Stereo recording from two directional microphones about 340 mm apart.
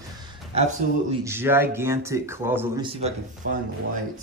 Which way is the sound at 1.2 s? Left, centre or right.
Centre.